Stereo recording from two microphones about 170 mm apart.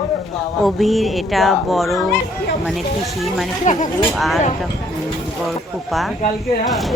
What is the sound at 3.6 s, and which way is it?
Speech, 45° left (ahead or behind).